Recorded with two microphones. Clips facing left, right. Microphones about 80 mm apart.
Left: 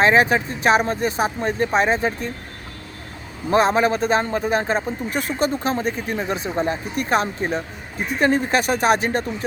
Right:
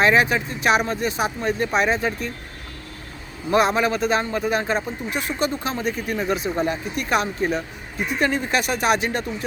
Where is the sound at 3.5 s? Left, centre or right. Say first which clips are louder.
Left 2 dB; left.